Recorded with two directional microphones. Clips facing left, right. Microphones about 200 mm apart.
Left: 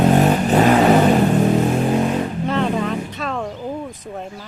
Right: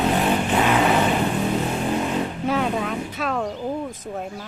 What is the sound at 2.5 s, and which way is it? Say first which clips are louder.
Vehicle: left 3 dB; 5° right (ahead or behind).